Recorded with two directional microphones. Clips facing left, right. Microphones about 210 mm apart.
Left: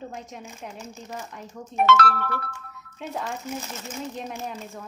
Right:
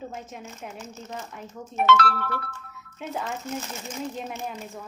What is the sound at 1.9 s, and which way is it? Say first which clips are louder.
Speech: even; 45° left (ahead or behind).